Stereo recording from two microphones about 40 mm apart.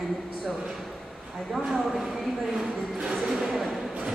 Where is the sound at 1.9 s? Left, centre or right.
Centre.